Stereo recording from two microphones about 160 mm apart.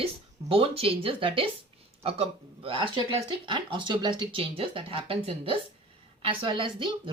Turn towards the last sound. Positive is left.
turn(degrees=-30)  # may be behind; listen again after turning